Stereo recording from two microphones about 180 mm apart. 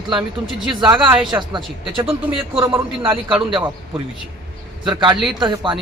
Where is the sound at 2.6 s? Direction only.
15° right (ahead or behind).